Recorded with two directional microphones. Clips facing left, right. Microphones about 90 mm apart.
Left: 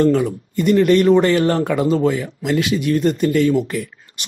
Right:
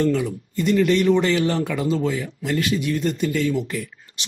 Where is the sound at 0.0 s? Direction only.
50° left (ahead or behind); by 2.8 s 75° left (ahead or behind).